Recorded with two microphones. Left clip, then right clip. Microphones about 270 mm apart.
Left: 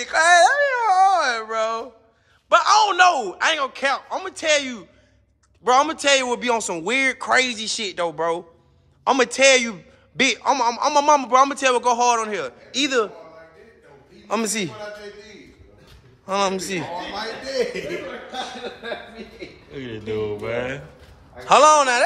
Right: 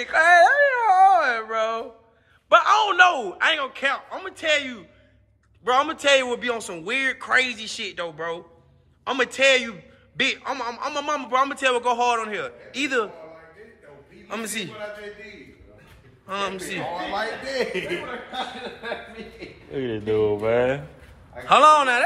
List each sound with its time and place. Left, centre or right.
0.0 s a sound: centre
2.5 s a man's voice: centre
14.2 s a man's voice: centre
16.3 s a man's voice: centre
19.7 s speech: centre
21.5 s a man's voice: centre